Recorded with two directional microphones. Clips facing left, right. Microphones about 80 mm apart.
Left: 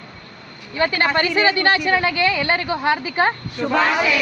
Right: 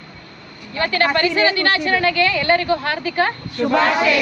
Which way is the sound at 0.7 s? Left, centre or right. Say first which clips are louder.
Right 1 dB; centre.